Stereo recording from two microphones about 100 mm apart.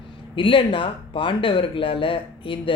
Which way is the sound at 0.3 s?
60° left (ahead or behind).